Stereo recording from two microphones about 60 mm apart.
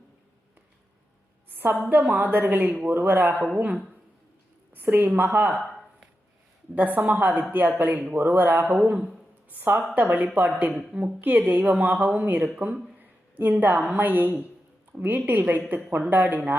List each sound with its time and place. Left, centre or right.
1.5 s a sound: right
1.9 s a woman's voice: right
6.7 s a woman's voice: right
8.6 s a woman's voice: right